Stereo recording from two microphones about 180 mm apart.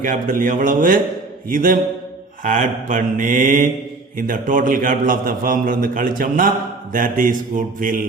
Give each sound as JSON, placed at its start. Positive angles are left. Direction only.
{"t": 0.0, "sound": "a man's voice", "side_deg": -50}